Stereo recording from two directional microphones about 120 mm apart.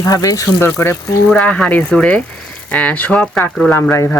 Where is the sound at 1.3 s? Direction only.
10° left (ahead or behind).